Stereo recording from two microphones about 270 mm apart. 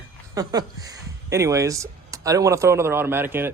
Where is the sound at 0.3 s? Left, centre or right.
Centre.